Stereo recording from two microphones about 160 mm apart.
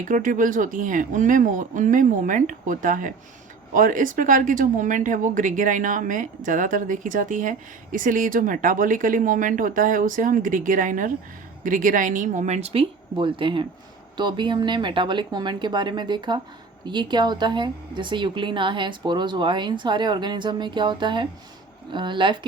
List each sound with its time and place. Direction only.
0.1 s a woman's voice: 55° right (ahead or behind); by 22.4 s 30° right (ahead or behind)